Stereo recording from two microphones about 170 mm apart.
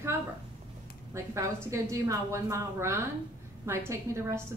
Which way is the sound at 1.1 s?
15° right (ahead or behind).